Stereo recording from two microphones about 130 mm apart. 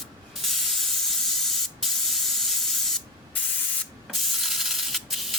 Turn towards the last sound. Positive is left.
turn(degrees=0)  # may be behind; listen again after turning